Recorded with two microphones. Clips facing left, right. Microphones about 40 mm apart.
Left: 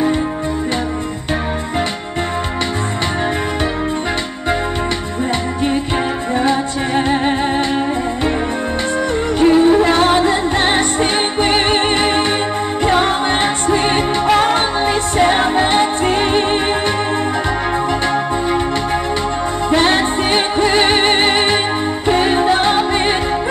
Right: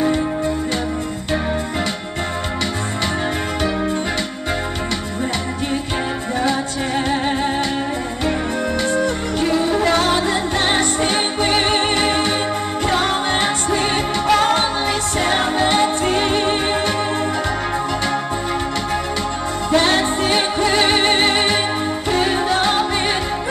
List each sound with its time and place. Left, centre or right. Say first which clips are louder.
6.4 s music: left 3 dB; left
8.9 s music: left 3 dB; left
19.7 s music: left 2 dB; left